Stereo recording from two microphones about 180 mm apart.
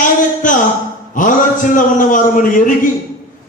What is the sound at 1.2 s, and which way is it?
A man's voice, 45° left (ahead or behind).